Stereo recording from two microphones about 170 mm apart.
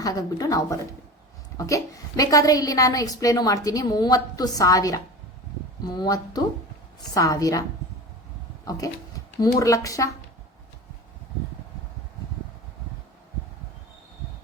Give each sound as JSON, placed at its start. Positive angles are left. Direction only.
{"t": 0.0, "sound": "a woman's voice", "side_deg": 20}
{"t": 8.8, "sound": "a woman's voice", "side_deg": 20}